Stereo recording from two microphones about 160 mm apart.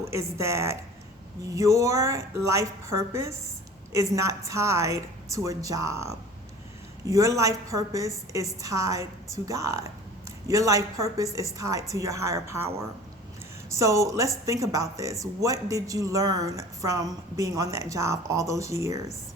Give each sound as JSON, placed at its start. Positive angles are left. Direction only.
{"t": 0.1, "sound": "a woman's voice", "side_deg": -15}